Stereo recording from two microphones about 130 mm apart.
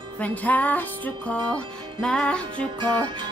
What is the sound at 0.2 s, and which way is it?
Music, 10° left (ahead or behind).